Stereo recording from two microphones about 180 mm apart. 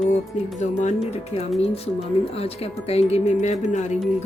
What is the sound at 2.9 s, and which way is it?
Music, 35° left (ahead or behind).